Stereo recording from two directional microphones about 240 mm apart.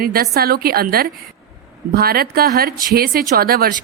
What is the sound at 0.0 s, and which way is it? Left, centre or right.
Speech, right.